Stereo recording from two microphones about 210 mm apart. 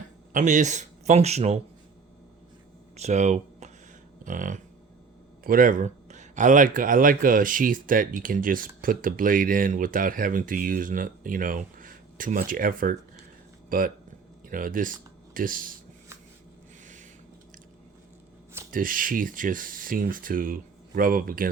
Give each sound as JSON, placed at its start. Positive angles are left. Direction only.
{"t": 0.3, "sound": "speech", "side_deg": -35}
{"t": 2.9, "sound": "a sound", "side_deg": -35}
{"t": 5.4, "sound": "speech", "side_deg": -40}
{"t": 18.7, "sound": "speech", "side_deg": -40}